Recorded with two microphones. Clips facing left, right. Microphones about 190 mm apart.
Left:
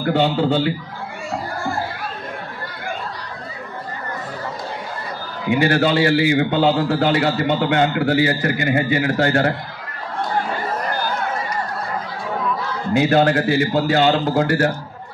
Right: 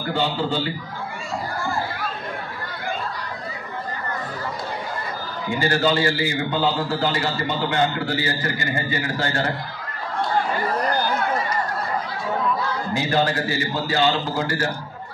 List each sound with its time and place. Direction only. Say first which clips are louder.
0.1 s a man's voice: left 6 dB; 60° left (ahead or behind)
5.5 s a man's voice: left 4 dB; 70° left (ahead or behind)
12.9 s a man's voice: left 7 dB; 60° left (ahead or behind)